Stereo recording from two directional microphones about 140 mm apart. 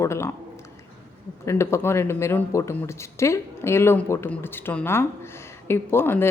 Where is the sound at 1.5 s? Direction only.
20° left (ahead or behind).